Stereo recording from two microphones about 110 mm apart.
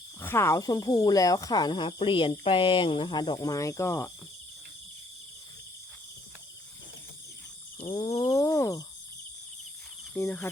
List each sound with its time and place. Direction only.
0.2 s speech: 20° left (ahead or behind)
8.2 s wild animals: 30° left (ahead or behind)
10.2 s wild animals: 20° left (ahead or behind)